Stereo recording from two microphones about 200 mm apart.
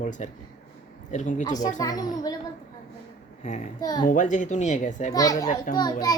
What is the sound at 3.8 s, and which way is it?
Speech, 20° left (ahead or behind).